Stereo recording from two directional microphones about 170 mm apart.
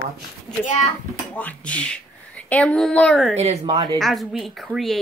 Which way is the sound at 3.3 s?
40° right (ahead or behind).